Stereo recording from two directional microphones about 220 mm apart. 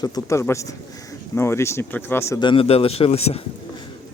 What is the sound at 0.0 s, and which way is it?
Speech, 15° left (ahead or behind).